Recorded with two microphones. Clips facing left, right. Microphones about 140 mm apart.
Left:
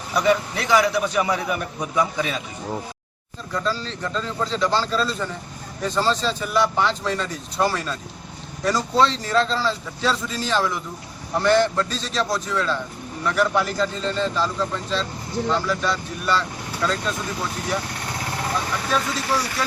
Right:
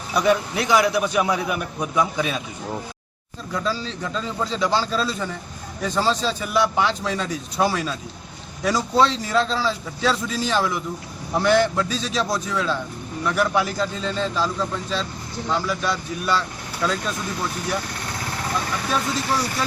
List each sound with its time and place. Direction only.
0.1 s a man's voice: 10° right (ahead or behind)
3.5 s a man's voice: 10° right (ahead or behind)